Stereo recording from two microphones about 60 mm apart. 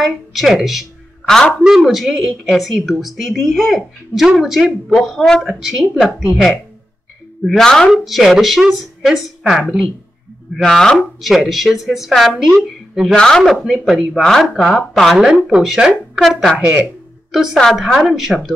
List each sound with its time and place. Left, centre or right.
0.0 s a woman's voice: centre
7.4 s a woman's voice: centre
7.9 s a woman's voice: centre
10.6 s a woman's voice: centre
11.1 s a woman's voice: centre
12.4 s a woman's voice: centre
13.1 s a woman's voice: centre
13.4 s a woman's voice: centre
16.5 s speech: right
17.3 s a woman's voice: centre
17.6 s a woman's voice: centre